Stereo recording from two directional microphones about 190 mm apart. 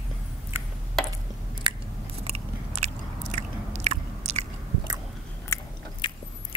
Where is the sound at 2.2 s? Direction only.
35° right (ahead or behind).